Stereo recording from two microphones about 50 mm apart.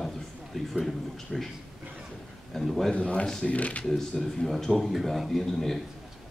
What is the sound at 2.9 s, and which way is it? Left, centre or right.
Speech, left.